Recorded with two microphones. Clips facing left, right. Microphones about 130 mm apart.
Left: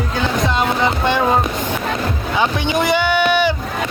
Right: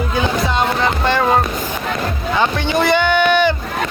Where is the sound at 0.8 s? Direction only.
15° left (ahead or behind).